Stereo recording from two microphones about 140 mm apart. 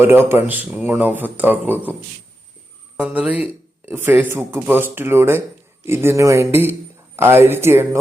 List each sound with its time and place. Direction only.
0.0 s speech: 15° right (ahead or behind)
3.0 s speech: 10° right (ahead or behind)